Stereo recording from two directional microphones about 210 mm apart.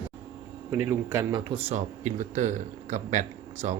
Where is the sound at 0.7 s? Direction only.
10° right (ahead or behind).